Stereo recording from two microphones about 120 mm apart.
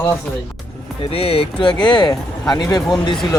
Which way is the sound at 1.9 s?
40° left (ahead or behind).